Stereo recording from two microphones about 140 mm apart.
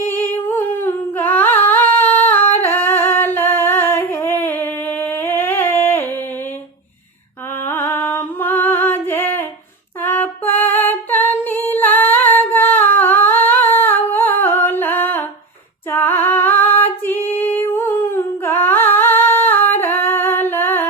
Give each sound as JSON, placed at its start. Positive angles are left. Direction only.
{"t": 0.1, "sound": "humming", "side_deg": 15}
{"t": 7.5, "sound": "mantra", "side_deg": 15}
{"t": 7.9, "sound": "music", "side_deg": 15}
{"t": 10.1, "sound": "female singing", "side_deg": 15}
{"t": 12.3, "sound": "humming", "side_deg": 15}
{"t": 15.9, "sound": "female singing", "side_deg": 15}
{"t": 17.2, "sound": "humming", "side_deg": 15}